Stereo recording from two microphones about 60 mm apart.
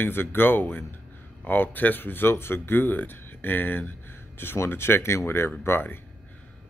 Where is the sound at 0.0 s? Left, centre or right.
Left.